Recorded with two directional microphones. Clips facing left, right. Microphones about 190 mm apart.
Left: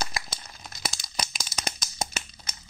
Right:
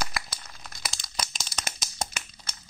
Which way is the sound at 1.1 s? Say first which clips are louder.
Left 1 dB; 5° left (ahead or behind).